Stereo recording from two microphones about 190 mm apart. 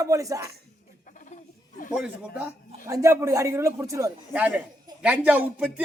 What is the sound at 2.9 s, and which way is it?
A man's voice, 15° right (ahead or behind).